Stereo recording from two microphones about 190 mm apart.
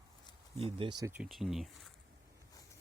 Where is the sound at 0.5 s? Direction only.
30° right (ahead or behind).